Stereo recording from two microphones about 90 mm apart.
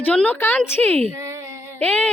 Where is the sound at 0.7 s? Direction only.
20° left (ahead or behind).